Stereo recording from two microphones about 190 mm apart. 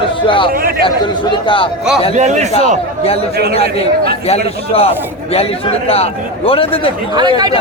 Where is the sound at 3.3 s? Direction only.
55° right (ahead or behind).